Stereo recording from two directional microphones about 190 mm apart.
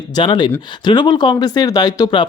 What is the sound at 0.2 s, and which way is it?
Speech, 25° left (ahead or behind).